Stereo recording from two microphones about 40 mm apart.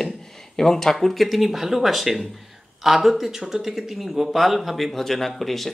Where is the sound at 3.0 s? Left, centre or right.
Centre.